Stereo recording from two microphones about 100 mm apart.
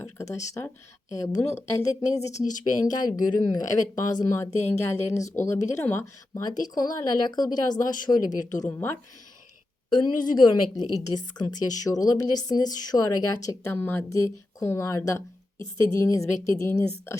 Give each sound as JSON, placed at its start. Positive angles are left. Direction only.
{"t": 0.0, "sound": "a woman's voice", "side_deg": 30}
{"t": 4.5, "sound": "speech", "side_deg": 90}
{"t": 4.8, "sound": "a woman's voice", "side_deg": 25}
{"t": 6.4, "sound": "a woman's voice", "side_deg": 40}
{"t": 8.7, "sound": "a woman's voice", "side_deg": 20}
{"t": 9.9, "sound": "a woman's voice", "side_deg": 50}
{"t": 13.7, "sound": "a woman's voice", "side_deg": 20}
{"t": 14.1, "sound": "a woman's voice", "side_deg": 30}